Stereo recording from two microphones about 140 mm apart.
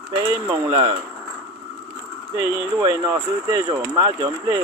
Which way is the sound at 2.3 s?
25° right (ahead or behind).